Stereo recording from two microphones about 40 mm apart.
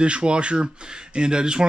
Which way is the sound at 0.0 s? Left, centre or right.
Right.